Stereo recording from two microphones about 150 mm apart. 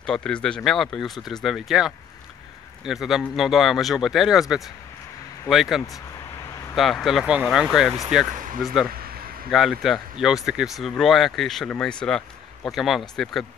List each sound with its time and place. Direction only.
0.0 s speech: 5° left (ahead or behind)
8.8 s a sound: 85° right
9.5 s speech: centre (ahead or behind)